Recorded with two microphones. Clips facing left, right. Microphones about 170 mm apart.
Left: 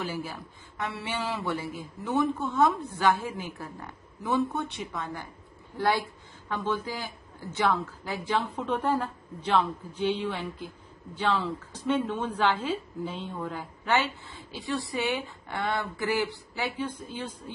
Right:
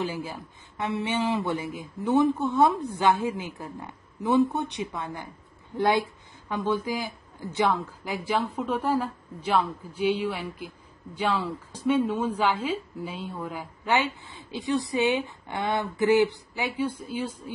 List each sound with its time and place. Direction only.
0.0 s a woman's voice: 15° right (ahead or behind)